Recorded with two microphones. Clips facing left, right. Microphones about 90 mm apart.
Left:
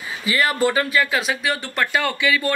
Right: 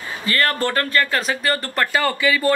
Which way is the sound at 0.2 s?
10° left (ahead or behind).